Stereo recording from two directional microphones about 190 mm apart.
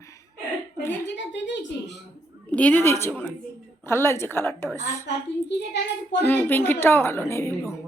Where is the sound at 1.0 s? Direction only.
65° left (ahead or behind).